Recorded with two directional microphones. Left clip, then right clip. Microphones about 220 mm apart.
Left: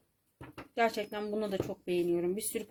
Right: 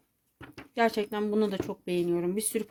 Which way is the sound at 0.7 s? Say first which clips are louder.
Right 4 dB; 50° right (ahead or behind).